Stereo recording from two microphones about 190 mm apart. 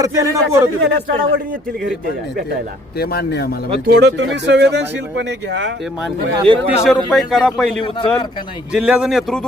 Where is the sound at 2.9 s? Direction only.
55° left (ahead or behind).